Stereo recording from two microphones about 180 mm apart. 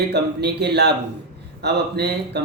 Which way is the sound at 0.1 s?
70° right (ahead or behind).